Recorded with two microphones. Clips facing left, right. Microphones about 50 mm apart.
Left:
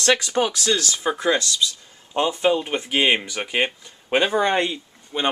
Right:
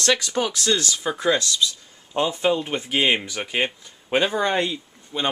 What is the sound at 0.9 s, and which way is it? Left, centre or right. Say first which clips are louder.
Speech: left 1 dB; left.